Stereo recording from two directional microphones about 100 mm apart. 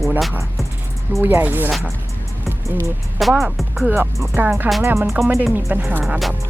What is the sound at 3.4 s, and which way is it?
Speech, centre (ahead or behind).